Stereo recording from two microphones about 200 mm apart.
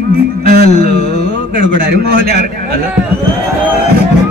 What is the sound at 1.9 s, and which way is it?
Speech, 50° right (ahead or behind).